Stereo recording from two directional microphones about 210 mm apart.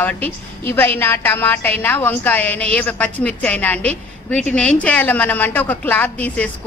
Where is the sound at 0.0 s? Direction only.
10° left (ahead or behind).